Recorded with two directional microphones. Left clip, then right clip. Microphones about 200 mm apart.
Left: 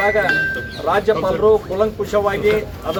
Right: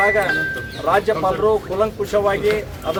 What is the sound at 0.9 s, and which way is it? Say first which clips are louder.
A man's voice: left 1 dB; centre (ahead or behind).